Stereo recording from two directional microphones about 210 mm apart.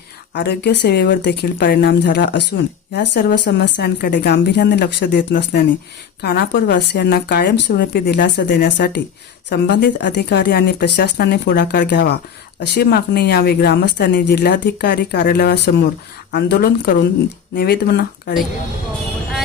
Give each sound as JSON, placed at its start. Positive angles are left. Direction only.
{"t": 0.3, "sound": "speech", "side_deg": 50}